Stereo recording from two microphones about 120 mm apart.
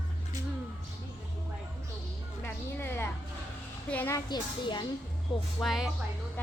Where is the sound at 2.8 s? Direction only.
20° left (ahead or behind).